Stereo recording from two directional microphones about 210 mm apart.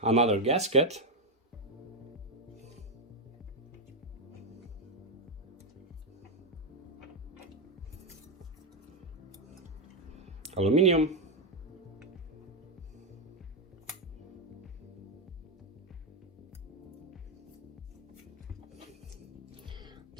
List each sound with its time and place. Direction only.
0.0 s speech: 30° right (ahead or behind)
10.5 s speech: 30° right (ahead or behind)
19.6 s cat: 20° right (ahead or behind)